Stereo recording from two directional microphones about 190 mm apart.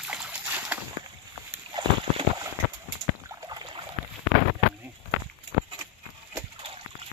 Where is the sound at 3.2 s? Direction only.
20° right (ahead or behind).